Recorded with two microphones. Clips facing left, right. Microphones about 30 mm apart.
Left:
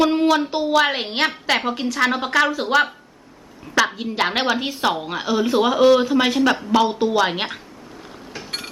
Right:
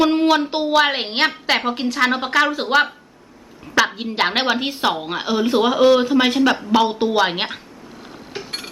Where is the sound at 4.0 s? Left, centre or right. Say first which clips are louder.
Right 1 dB; centre.